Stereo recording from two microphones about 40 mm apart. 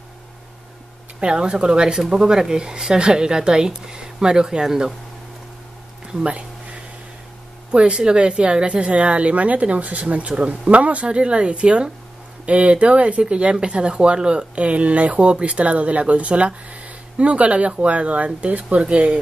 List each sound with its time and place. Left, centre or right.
1.2 s speech: right
6.2 s a sound: right
7.7 s speech: right